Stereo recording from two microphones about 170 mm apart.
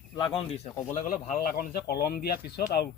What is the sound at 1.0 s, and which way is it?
Speech, 50° left (ahead or behind).